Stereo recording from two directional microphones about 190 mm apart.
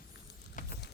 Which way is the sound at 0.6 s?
45° left (ahead or behind).